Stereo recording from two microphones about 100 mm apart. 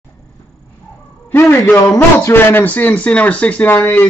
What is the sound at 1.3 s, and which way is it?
A man's voice, 20° left (ahead or behind).